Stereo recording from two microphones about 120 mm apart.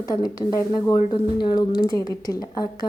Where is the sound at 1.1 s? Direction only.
40° left (ahead or behind).